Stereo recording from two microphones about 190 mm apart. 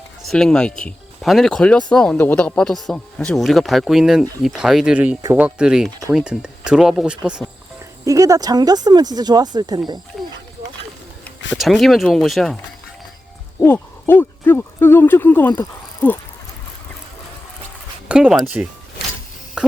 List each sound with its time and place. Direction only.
0.3 s speech: 5° left (ahead or behind)
8.0 s speech: 15° right (ahead or behind)
11.5 s speech: centre (ahead or behind)
13.6 s speech: 10° left (ahead or behind)
18.1 s speech: 5° right (ahead or behind)
19.6 s plop: 5° right (ahead or behind)